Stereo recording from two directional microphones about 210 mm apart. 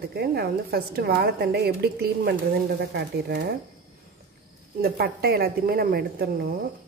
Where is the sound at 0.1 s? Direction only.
50° right (ahead or behind).